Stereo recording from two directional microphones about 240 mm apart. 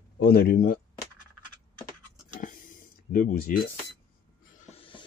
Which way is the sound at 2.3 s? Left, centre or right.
Left.